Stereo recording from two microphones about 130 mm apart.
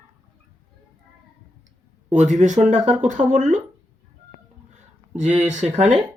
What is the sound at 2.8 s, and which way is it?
Speech, 5° right (ahead or behind).